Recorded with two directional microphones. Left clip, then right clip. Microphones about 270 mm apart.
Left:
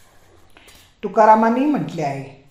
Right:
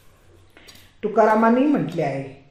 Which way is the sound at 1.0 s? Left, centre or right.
Left.